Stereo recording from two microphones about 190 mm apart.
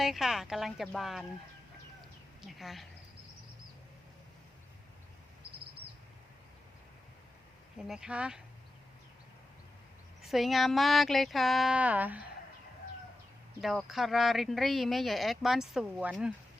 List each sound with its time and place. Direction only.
0.0 s speech: centre (ahead or behind)
2.6 s speech: centre (ahead or behind)
7.8 s speech: 5° right (ahead or behind)
10.2 s speech: centre (ahead or behind)
13.6 s speech: centre (ahead or behind)